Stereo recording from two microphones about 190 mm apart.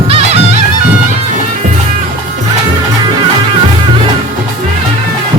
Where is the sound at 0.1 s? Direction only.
30° right (ahead or behind).